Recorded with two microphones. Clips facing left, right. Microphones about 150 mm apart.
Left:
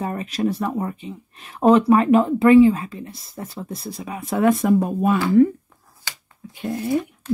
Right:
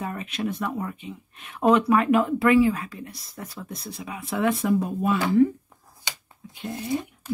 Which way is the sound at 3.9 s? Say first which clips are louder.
Left 5 dB; 40° left (ahead or behind).